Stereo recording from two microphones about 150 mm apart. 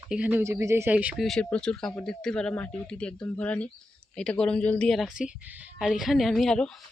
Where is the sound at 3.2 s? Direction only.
20° left (ahead or behind).